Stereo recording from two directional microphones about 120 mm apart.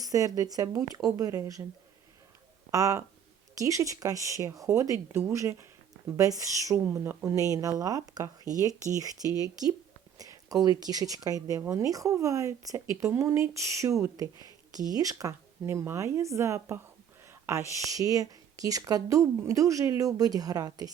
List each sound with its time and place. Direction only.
0.0 s speech: 30° right (ahead or behind)
2.7 s speech: 25° right (ahead or behind)